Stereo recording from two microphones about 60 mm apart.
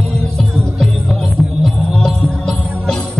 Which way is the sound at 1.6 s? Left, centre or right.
Centre.